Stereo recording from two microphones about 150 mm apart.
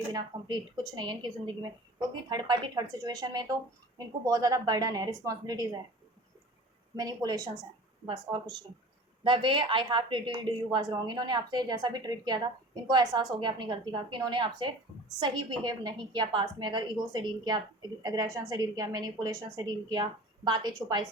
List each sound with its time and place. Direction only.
0.1 s a woman's voice: 30° right (ahead or behind)
6.9 s a woman's voice: 25° right (ahead or behind)
9.2 s a woman's voice: 35° right (ahead or behind)